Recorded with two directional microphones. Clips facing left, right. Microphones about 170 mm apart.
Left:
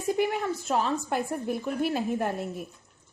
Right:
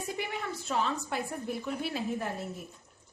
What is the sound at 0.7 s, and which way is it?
A woman's voice, 45° left (ahead or behind).